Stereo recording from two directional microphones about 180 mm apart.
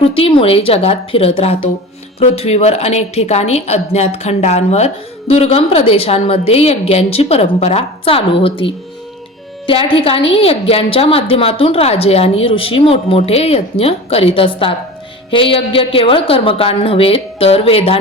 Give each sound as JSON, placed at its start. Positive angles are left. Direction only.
{"t": 0.0, "sound": "a woman's voice", "side_deg": 30}